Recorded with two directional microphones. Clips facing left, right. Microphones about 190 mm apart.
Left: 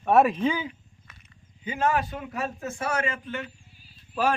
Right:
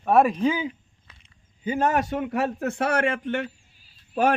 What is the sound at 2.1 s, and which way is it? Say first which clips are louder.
Speech: right 7 dB; 60° right (ahead or behind).